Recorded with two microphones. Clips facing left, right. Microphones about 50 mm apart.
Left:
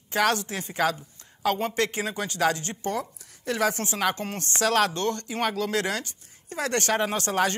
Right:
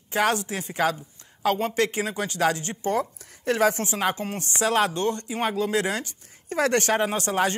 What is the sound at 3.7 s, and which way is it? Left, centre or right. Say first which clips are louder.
Speech: right 2 dB; left.